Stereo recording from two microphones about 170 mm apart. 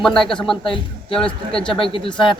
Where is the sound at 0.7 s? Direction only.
30° left (ahead or behind).